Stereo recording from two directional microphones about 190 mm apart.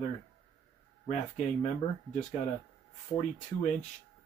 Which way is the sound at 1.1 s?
35° left (ahead or behind).